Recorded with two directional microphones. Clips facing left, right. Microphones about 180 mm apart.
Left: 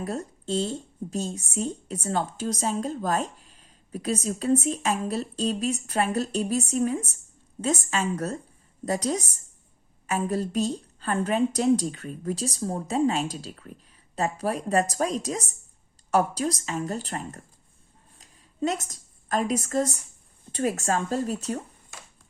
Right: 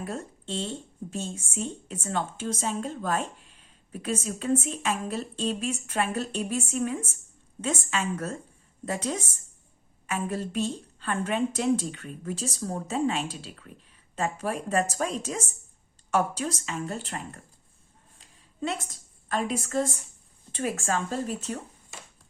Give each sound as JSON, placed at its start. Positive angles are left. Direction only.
{"t": 0.0, "sound": "speech", "side_deg": 40}
{"t": 18.2, "sound": "a sound", "side_deg": 40}
{"t": 20.5, "sound": "speech", "side_deg": 40}